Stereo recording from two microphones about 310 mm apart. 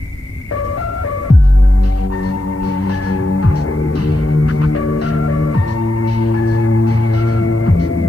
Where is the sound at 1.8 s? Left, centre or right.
Left.